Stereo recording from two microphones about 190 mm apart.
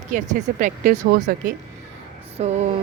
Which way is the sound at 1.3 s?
55° right (ahead or behind).